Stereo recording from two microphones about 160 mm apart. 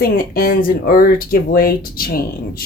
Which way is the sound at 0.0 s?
65° left (ahead or behind).